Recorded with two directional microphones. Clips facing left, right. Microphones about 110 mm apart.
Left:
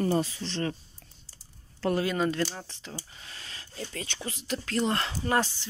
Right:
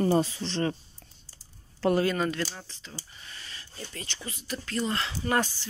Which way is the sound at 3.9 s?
90° left.